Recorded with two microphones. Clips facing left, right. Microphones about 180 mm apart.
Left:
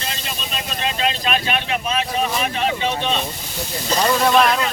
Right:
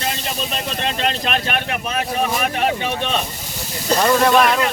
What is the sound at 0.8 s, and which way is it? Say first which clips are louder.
Boat: left 1 dB; 55° right (ahead or behind).